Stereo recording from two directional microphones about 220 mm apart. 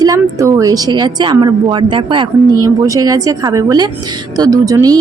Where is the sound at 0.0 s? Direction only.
15° right (ahead or behind).